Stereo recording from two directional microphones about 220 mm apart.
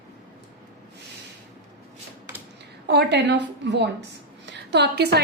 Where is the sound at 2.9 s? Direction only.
50° right (ahead or behind).